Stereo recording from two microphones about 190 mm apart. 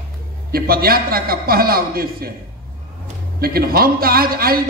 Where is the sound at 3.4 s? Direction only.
50° right (ahead or behind).